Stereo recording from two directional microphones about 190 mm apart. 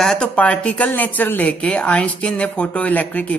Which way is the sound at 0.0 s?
5° left (ahead or behind).